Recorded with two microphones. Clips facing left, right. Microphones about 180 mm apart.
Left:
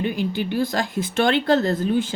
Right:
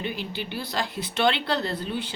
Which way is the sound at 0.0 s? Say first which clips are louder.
Left 8 dB; 45° left (ahead or behind).